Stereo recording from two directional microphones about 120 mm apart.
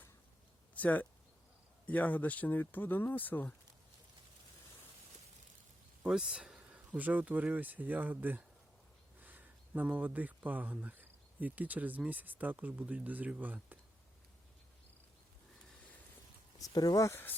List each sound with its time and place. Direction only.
0.7 s a sound: 15° left (ahead or behind)
1.9 s speech: 15° left (ahead or behind)
6.0 s speech: 5° right (ahead or behind)
16.6 s speech: 30° left (ahead or behind)